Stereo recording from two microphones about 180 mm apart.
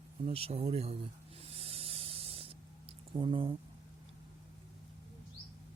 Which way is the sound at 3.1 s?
30° right (ahead or behind).